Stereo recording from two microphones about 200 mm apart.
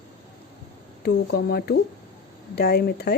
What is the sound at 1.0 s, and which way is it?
Speech, 55° left (ahead or behind).